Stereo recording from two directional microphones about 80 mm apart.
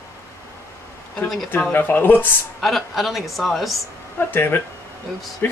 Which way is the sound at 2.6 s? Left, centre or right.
Centre.